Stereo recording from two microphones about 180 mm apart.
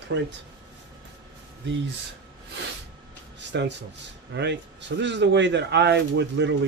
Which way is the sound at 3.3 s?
75° right (ahead or behind).